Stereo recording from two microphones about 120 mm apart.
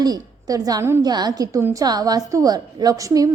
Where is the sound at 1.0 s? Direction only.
35° right (ahead or behind).